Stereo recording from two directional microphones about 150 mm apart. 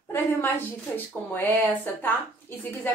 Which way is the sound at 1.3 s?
15° left (ahead or behind).